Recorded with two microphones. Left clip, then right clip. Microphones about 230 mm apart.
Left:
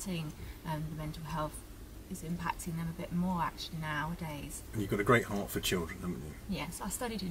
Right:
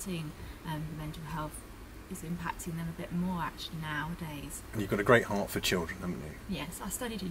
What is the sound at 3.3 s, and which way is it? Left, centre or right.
Speech, centre.